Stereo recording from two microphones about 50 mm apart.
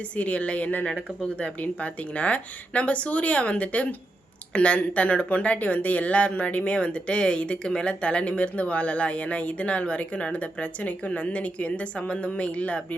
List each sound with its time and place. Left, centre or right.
0.2 s speech: left